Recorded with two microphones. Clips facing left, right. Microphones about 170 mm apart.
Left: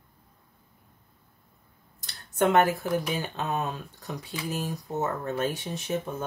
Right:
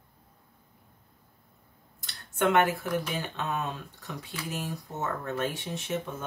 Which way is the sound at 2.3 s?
40° left (ahead or behind).